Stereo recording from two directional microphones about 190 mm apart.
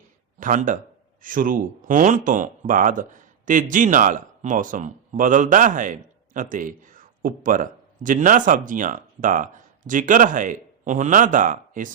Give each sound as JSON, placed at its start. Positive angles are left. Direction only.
{"t": 0.3, "sound": "speech", "side_deg": -45}